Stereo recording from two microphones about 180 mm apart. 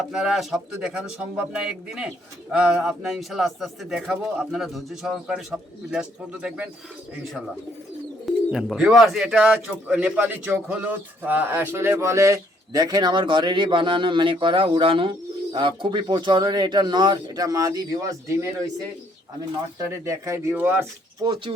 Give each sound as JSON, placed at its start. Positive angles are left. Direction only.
{"t": 0.1, "sound": "speech", "side_deg": -5}
{"t": 8.4, "sound": "speech", "side_deg": -5}
{"t": 19.9, "sound": "speech", "side_deg": -15}
{"t": 21.2, "sound": "speech", "side_deg": -25}